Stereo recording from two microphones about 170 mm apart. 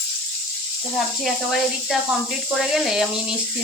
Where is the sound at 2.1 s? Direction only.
Centre (ahead or behind).